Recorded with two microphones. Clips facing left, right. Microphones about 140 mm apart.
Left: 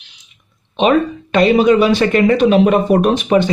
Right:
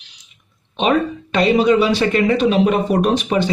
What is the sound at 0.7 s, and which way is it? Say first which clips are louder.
Speech: left 4 dB; 55° left (ahead or behind).